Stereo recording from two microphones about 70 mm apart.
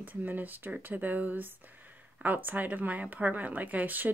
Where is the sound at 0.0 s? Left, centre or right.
Right.